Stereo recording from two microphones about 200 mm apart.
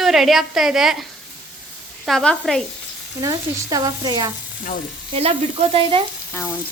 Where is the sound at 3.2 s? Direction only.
20° right (ahead or behind).